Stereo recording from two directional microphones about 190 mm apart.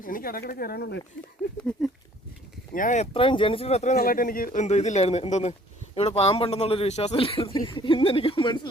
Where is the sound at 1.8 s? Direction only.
Centre (ahead or behind).